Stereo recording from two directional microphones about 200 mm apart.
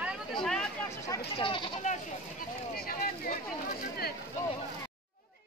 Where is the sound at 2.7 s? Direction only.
45° left (ahead or behind).